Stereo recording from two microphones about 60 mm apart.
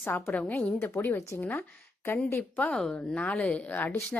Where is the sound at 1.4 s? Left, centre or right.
Left.